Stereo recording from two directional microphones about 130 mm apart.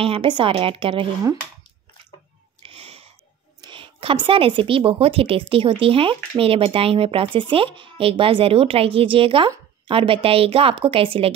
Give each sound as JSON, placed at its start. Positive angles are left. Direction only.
{"t": 0.0, "sound": "a woman's voice", "side_deg": -40}
{"t": 2.6, "sound": "a sound", "side_deg": -50}
{"t": 3.6, "sound": "a woman's voice", "side_deg": -40}